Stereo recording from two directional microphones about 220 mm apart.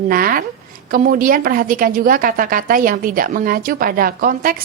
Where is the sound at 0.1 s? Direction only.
40° right (ahead or behind).